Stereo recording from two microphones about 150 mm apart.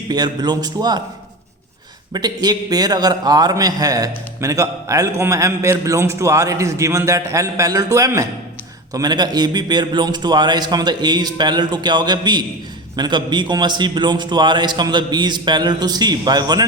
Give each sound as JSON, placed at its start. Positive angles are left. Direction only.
{"t": 0.1, "sound": "a man's voice", "side_deg": -30}
{"t": 2.1, "sound": "a man's voice", "side_deg": -25}